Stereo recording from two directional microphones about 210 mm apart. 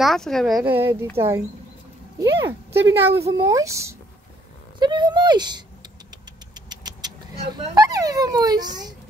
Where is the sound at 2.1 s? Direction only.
15° right (ahead or behind).